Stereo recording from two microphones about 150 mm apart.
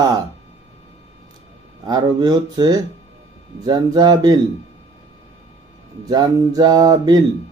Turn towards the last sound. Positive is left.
turn(degrees=-25)  # may be behind; listen again after turning